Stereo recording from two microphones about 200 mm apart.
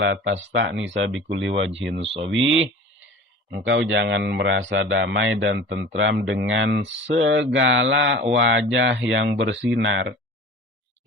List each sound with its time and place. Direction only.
0.0 s speech: 60° right (ahead or behind)
2.0 s speech: 30° right (ahead or behind)
3.6 s speech: 70° right (ahead or behind)